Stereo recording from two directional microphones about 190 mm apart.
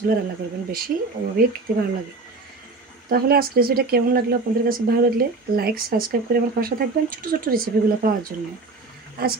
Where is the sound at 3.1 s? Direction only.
50° right (ahead or behind).